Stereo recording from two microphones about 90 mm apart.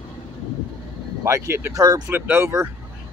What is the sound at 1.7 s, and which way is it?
Speech, 45° right (ahead or behind).